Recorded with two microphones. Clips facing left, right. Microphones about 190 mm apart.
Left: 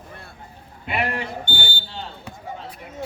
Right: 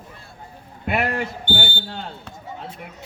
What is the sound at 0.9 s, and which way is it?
Speech, 50° right (ahead or behind).